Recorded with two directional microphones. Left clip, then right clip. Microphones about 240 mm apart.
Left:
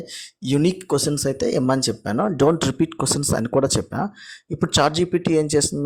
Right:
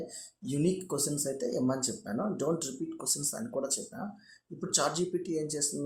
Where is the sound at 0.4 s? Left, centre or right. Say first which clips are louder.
Left 11 dB; left.